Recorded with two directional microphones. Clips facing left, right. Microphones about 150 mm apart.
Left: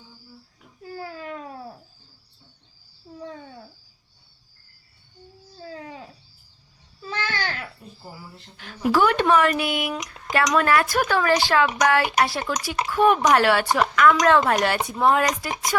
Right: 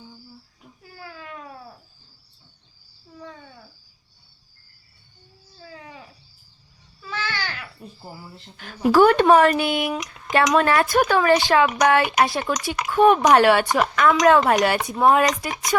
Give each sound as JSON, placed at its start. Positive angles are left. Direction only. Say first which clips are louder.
{"t": 0.9, "sound": "babbling", "louder": "left 5 dB", "side_deg": 30}
{"t": 5.5, "sound": "a sound", "louder": "left 4 dB", "side_deg": 30}
{"t": 7.1, "sound": "babbling", "louder": "left 1 dB", "side_deg": 40}
{"t": 8.9, "sound": "speech", "louder": "right 5 dB", "side_deg": -40}